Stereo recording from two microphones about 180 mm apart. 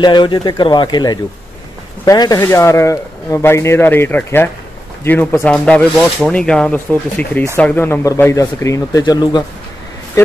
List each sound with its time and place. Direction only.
0.0 s speech: 25° left (ahead or behind)